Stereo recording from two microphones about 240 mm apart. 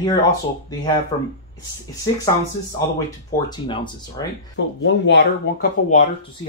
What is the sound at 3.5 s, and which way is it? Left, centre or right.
Speech, centre.